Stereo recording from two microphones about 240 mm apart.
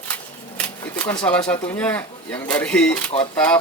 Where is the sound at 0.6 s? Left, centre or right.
Centre.